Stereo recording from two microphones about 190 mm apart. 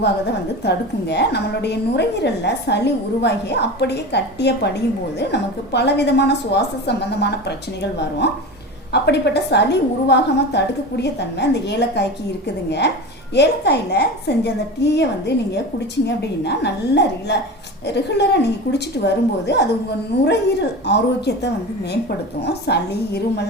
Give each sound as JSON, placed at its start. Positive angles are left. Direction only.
{"t": 0.6, "sound": "a woman's voice", "side_deg": 60}
{"t": 13.3, "sound": "a woman's voice", "side_deg": 60}